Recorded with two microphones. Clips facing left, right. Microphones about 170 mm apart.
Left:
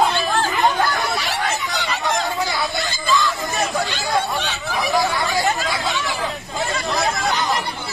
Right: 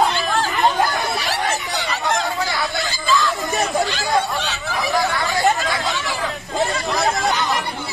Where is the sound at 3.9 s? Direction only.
Centre (ahead or behind).